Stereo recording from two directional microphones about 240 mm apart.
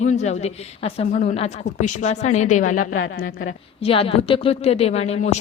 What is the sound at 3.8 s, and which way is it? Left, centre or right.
A woman's voice, left.